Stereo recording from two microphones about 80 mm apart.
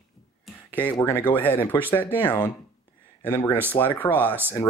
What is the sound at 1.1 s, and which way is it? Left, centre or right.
Speech, left.